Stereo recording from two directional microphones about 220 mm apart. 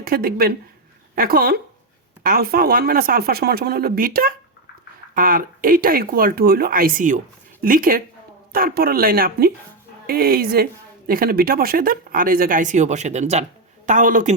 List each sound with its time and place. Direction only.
0.0 s speech: 45° right (ahead or behind)